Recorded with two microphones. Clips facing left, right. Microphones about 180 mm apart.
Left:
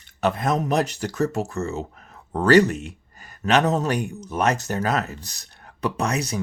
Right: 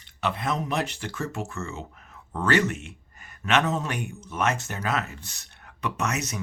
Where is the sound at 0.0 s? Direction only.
45° left (ahead or behind).